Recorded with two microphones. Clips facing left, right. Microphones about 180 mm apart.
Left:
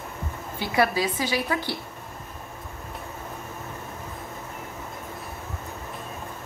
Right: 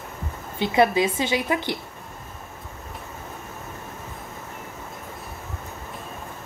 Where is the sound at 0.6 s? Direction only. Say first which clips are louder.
Right 4 dB; 20° right (ahead or behind).